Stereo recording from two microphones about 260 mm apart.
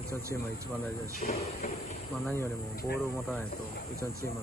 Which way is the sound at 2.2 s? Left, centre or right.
Centre.